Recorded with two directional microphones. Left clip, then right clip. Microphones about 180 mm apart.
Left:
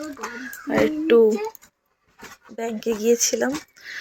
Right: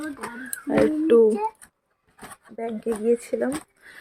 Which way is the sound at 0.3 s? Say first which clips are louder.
Even; 15° right (ahead or behind).